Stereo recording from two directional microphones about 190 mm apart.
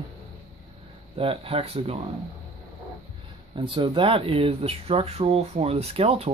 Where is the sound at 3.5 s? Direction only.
25° right (ahead or behind).